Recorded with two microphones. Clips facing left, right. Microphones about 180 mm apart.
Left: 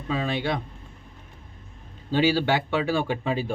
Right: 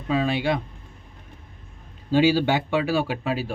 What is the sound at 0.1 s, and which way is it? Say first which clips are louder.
Speech: right 4 dB; 10° right (ahead or behind).